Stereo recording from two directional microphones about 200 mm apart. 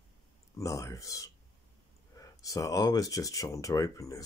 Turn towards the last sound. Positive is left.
turn(degrees=15)  # may be behind; listen again after turning